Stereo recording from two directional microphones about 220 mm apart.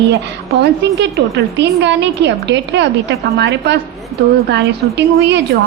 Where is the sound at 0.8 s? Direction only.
50° right (ahead or behind).